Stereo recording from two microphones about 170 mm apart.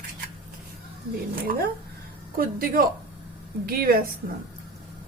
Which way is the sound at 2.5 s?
60° right (ahead or behind).